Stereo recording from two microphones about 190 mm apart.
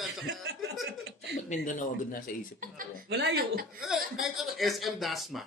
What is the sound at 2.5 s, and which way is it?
A woman's voice, 55° right (ahead or behind).